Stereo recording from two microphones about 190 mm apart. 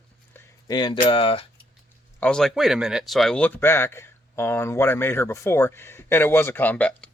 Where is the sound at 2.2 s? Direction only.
5° left (ahead or behind).